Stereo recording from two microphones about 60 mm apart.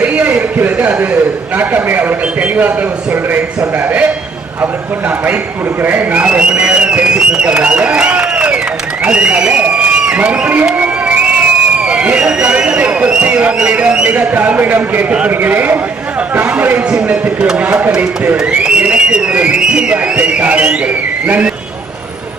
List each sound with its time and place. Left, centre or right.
0.0 s a sound: right
1.5 s speech: right
5.8 s a man's voice: right
10.8 s a sound: right
11.9 s a man's voice: centre
16.9 s speech: centre
17.7 s speech: right
17.9 s speech: centre